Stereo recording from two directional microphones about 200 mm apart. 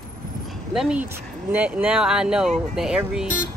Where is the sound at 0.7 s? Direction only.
5° right (ahead or behind).